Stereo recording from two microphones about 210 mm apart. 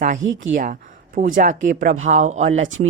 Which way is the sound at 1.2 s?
40° right (ahead or behind).